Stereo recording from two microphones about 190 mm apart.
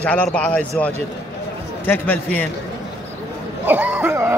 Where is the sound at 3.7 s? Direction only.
10° right (ahead or behind).